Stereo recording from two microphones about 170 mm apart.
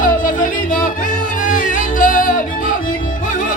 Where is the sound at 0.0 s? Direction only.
50° left (ahead or behind).